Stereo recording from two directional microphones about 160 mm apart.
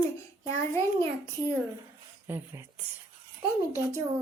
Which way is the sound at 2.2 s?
15° right (ahead or behind).